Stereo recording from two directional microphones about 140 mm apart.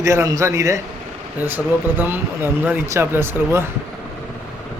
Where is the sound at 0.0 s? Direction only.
20° right (ahead or behind).